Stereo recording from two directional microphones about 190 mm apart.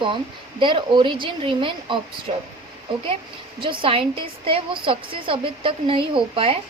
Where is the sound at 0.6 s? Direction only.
25° right (ahead or behind).